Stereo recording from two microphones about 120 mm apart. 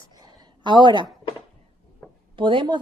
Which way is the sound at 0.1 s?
35° right (ahead or behind).